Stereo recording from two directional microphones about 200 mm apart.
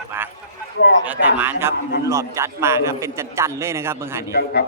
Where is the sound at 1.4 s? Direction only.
10° right (ahead or behind).